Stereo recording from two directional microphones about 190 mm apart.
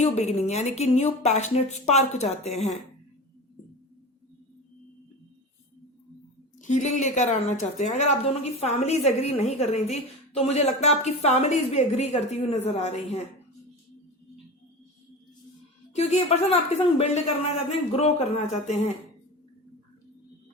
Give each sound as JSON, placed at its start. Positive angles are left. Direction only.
{"t": 0.0, "sound": "a woman's voice", "side_deg": 35}
{"t": 6.6, "sound": "a woman's voice", "side_deg": 40}
{"t": 16.0, "sound": "a woman's voice", "side_deg": 35}